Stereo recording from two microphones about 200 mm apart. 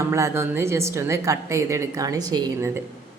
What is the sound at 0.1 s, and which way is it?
Speech, 10° right (ahead or behind).